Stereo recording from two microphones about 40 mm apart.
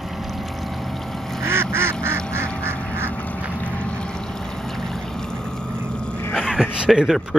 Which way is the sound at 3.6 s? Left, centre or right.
Left.